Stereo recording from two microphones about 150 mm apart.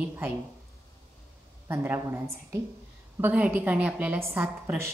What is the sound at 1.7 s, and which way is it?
A woman's voice, 15° right (ahead or behind).